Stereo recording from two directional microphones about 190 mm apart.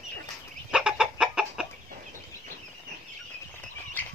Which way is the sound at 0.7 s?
5° right (ahead or behind).